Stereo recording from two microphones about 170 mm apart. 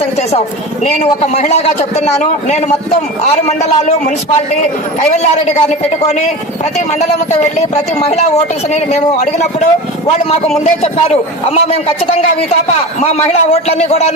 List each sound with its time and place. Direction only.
0.9 s a man's voice: 40° left (ahead or behind)
5.1 s a man's voice: 40° left (ahead or behind)
8.9 s a man's voice: 40° left (ahead or behind)